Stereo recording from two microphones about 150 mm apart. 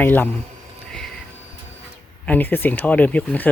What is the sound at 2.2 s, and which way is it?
Speech, 10° left (ahead or behind).